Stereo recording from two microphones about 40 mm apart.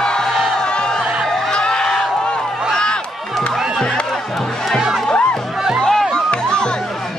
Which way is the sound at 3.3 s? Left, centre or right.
Centre.